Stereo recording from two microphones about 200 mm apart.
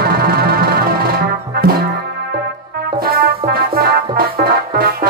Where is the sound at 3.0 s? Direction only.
50° right (ahead or behind).